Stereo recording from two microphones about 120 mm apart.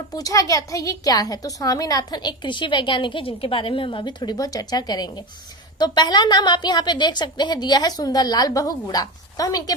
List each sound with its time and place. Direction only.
0.2 s a woman's voice: 30° left (ahead or behind)